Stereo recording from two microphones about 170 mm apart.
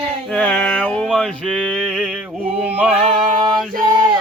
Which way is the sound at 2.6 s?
5° right (ahead or behind).